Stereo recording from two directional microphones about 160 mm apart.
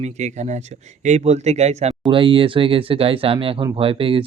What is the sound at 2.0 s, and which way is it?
Speech, 35° right (ahead or behind).